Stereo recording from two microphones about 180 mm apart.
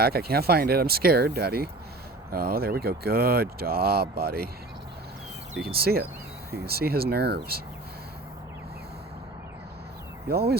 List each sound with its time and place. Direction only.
0.0 s speech: 60° right (ahead or behind)
5.6 s speech: 60° right (ahead or behind)
10.2 s speech: 60° right (ahead or behind)